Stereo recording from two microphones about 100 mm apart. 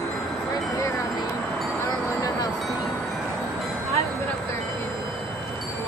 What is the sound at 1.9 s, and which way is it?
Music, 35° left (ahead or behind).